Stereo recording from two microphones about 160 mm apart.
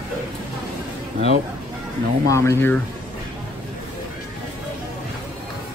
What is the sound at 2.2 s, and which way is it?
Speech, 20° left (ahead or behind).